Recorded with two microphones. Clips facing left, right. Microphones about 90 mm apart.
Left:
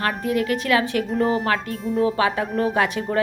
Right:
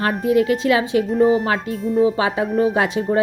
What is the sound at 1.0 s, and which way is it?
Speech, centre (ahead or behind).